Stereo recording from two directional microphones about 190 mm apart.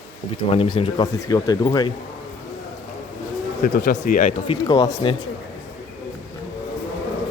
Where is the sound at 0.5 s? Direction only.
30° left (ahead or behind).